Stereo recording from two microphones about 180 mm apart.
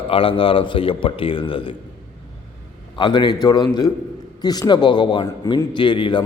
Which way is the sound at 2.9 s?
25° left (ahead or behind).